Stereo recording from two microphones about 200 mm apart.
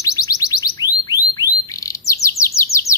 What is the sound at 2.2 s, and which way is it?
Chirp, 15° left (ahead or behind).